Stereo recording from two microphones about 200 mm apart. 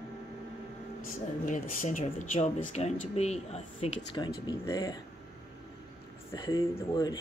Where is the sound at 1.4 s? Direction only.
40° left (ahead or behind); by 5.0 s 15° left (ahead or behind).